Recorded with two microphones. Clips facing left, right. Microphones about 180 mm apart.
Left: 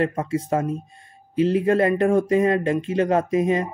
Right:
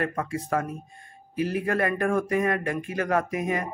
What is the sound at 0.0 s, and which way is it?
Speech, 25° left (ahead or behind).